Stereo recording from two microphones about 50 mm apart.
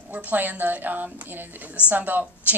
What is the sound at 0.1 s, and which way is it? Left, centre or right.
Speech, right.